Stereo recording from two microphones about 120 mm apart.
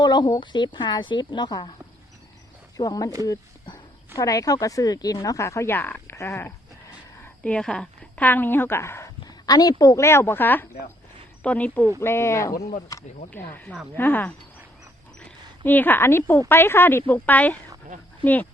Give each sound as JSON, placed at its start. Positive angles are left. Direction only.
{"t": 0.0, "sound": "a woman's voice", "side_deg": 40}
{"t": 2.7, "sound": "a woman's voice", "side_deg": 30}
{"t": 7.4, "sound": "a woman's voice", "side_deg": 10}
{"t": 9.2, "sound": "speech", "side_deg": 35}
{"t": 13.3, "sound": "a woman's voice", "side_deg": 15}